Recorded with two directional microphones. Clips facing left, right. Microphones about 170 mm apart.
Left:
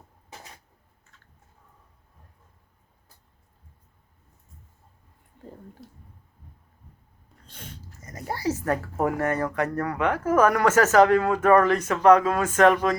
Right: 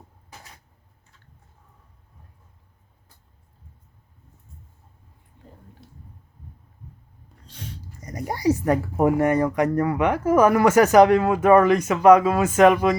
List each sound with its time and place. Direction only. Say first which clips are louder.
7.4 s snort: right 5 dB; 50° left (ahead or behind)
8.0 s speech: right 6 dB; 15° right (ahead or behind)